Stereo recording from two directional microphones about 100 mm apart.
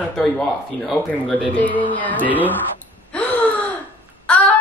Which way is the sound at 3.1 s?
15° left (ahead or behind).